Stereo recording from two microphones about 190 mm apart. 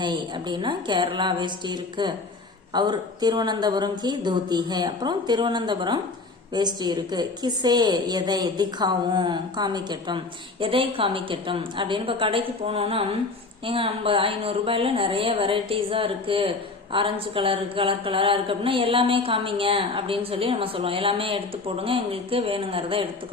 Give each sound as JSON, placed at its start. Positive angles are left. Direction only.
{"t": 0.0, "sound": "speech", "side_deg": -25}